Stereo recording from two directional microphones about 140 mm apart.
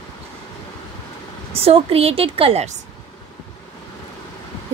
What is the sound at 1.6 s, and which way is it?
Speech, 45° right (ahead or behind).